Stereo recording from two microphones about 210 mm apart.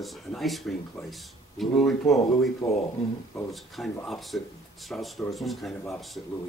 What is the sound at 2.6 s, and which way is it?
Speech, 20° left (ahead or behind).